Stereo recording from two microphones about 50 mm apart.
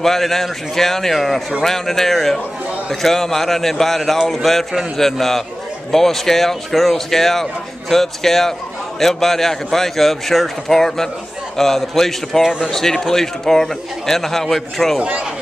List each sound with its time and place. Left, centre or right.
0.0 s speech: centre
12.4 s speech: centre
12.7 s a man's voice: centre
15.0 s speech: right